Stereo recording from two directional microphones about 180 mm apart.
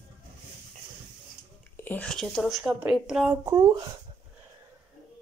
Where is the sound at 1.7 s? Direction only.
10° left (ahead or behind).